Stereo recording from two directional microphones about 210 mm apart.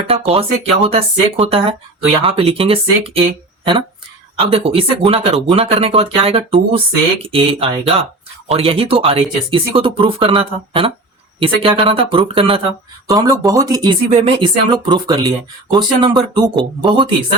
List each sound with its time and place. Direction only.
0.1 s speech: 25° right (ahead or behind)
4.4 s speech: 25° right (ahead or behind)